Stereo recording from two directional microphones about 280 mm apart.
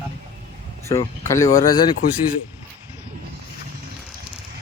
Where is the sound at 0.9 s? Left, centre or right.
Centre.